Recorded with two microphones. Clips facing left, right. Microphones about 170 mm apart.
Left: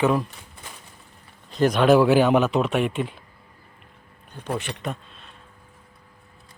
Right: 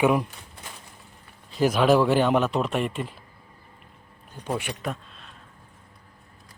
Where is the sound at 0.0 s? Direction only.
15° right (ahead or behind).